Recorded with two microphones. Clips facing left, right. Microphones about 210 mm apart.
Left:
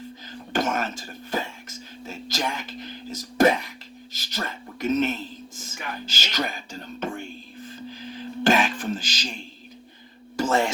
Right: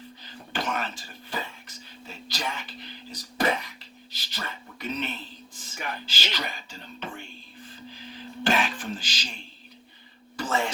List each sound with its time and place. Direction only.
0.3 s whispering: 45° left (ahead or behind)
4.1 s a sound: 45° left (ahead or behind)
8.4 s throat clearing: 45° left (ahead or behind)